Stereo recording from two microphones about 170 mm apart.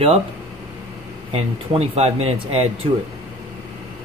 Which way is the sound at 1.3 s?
35° right (ahead or behind).